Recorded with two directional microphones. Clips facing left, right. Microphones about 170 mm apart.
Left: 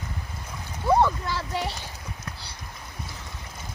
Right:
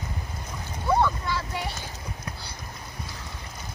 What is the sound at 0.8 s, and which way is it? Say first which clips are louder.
Boat: left 2 dB; 35° left (ahead or behind).